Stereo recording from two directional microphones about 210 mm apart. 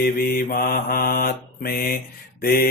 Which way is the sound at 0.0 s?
40° left (ahead or behind).